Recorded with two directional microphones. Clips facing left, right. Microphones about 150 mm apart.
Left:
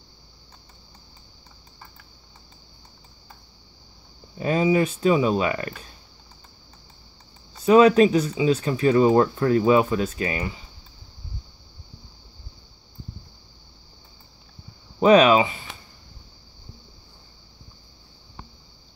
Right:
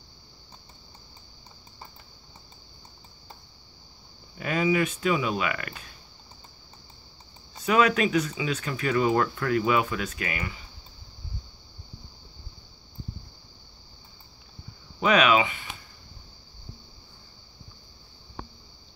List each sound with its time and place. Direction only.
4.4 s speech: 30° left (ahead or behind)
7.6 s speech: 30° left (ahead or behind)
15.0 s a sound: 35° left (ahead or behind)